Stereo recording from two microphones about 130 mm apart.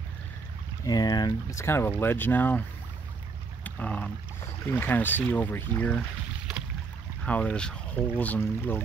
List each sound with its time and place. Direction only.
0.8 s speech: 30° left (ahead or behind)
1.6 s speech: 20° left (ahead or behind)
3.6 s boat: 10° left (ahead or behind)
4.6 s speech: 15° left (ahead or behind)
7.2 s speech: 10° left (ahead or behind)